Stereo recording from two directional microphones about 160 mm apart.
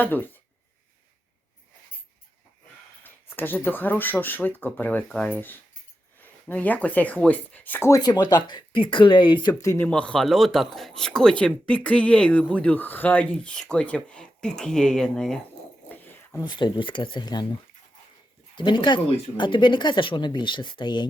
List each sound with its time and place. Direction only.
0.0 s speech: 10° left (ahead or behind)
3.0 s speech: 10° left (ahead or behind)
6.5 s speech: 10° left (ahead or behind)
15.9 s dog: 10° left (ahead or behind)
16.4 s speech: 25° left (ahead or behind)
18.5 s speech: 30° left (ahead or behind)